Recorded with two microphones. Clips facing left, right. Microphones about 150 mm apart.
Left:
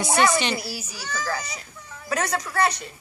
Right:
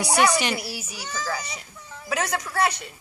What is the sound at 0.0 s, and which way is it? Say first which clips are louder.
Speech: even; 15° right (ahead or behind).